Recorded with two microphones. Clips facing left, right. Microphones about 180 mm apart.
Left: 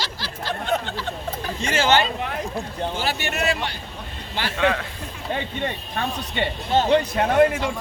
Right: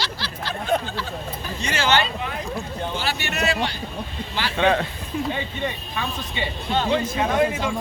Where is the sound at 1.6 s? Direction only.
50° left (ahead or behind).